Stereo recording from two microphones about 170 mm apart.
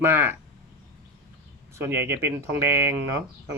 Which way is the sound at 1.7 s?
15° right (ahead or behind).